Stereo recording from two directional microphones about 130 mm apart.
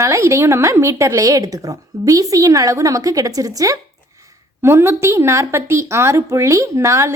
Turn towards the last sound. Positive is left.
turn(degrees=-20)  # may be behind; listen again after turning